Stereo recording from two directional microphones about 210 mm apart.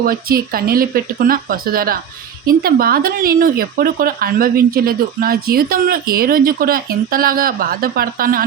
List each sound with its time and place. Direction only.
0.0 s speech: 45° right (ahead or behind)